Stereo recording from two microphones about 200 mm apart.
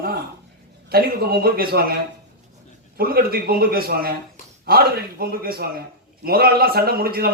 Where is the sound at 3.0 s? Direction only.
50° right (ahead or behind).